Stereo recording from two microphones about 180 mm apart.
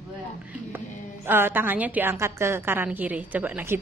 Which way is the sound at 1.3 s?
10° right (ahead or behind).